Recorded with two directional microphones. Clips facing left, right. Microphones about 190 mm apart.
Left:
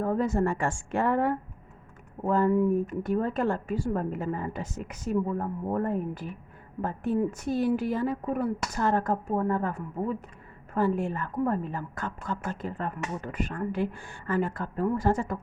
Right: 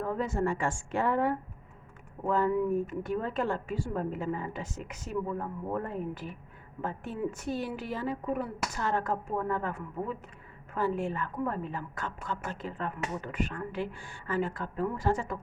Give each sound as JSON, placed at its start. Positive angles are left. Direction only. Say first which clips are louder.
{"t": 0.0, "sound": "a woman's voice", "louder": "left 4 dB", "side_deg": 40}